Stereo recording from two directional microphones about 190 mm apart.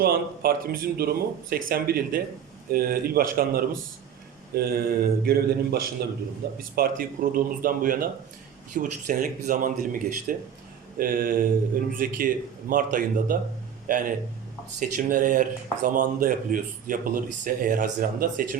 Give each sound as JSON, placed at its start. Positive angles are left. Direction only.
{"t": 0.0, "sound": "speech", "side_deg": -50}